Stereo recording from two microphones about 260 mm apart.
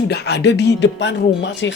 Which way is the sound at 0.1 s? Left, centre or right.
Left.